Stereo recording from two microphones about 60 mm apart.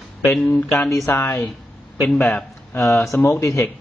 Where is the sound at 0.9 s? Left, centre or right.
Left.